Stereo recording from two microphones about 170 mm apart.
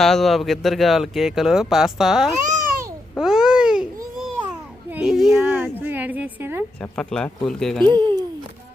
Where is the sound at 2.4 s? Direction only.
45° right (ahead or behind).